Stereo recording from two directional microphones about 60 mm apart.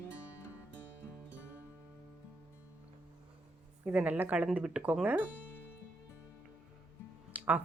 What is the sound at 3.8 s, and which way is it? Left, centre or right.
Speech, right.